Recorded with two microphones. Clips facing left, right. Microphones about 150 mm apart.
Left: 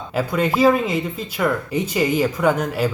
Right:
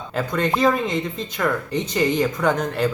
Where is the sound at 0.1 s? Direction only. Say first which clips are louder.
Left 2 dB; 5° left (ahead or behind).